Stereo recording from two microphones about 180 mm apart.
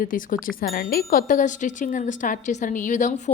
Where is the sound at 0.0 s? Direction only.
50° left (ahead or behind).